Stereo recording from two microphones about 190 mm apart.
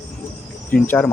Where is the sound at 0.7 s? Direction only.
10° left (ahead or behind).